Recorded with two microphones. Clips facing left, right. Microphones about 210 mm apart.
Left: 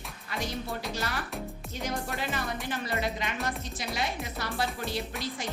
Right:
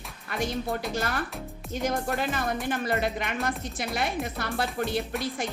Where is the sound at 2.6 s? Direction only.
50° right (ahead or behind).